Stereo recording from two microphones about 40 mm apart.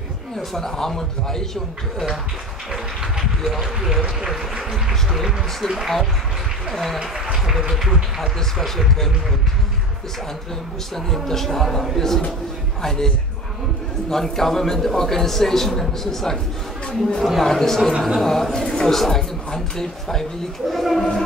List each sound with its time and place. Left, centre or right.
0.4 s a man's voice: centre
2.7 s speech: centre
6.7 s a woman's voice: centre
7.0 s speech: centre
7.7 s a woman's voice: centre
11.1 s a man's voice: centre
14.1 s a man's voice: centre